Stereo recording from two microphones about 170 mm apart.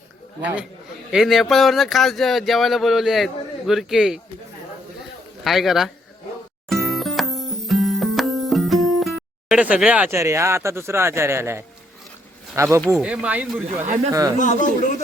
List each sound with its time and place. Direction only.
0.4 s speech: 10° right (ahead or behind)
5.4 s speech: centre (ahead or behind)
6.7 s music: centre (ahead or behind); by 11.6 s 15° right (ahead or behind)
12.5 s speech: 15° right (ahead or behind)
13.8 s speech: 45° right (ahead or behind)
14.1 s speech: 20° right (ahead or behind)
14.3 s speech: 45° left (ahead or behind)